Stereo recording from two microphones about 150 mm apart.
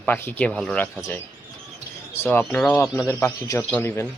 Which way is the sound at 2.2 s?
15° left (ahead or behind).